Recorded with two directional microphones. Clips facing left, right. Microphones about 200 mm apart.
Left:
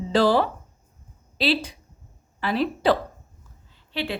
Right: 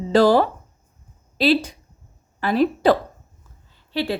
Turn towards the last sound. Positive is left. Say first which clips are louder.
# right 5 dB
turn(degrees=-40)  # may be behind; listen again after turning